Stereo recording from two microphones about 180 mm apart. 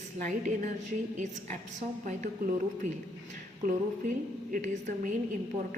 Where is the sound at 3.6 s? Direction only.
45° right (ahead or behind).